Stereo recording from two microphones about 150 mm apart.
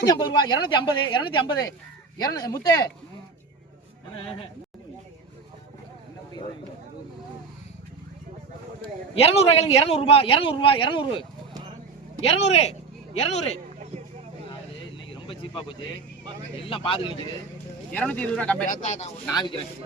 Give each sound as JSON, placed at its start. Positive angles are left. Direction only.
{"t": 0.1, "sound": "speech", "side_deg": 30}
{"t": 9.1, "sound": "speech", "side_deg": 40}
{"t": 12.2, "sound": "speech", "side_deg": 45}
{"t": 15.1, "sound": "a sound", "side_deg": 35}
{"t": 16.6, "sound": "speech", "side_deg": 35}
{"t": 17.9, "sound": "speech", "side_deg": 10}
{"t": 18.6, "sound": "speech", "side_deg": 55}
{"t": 19.3, "sound": "speech", "side_deg": 30}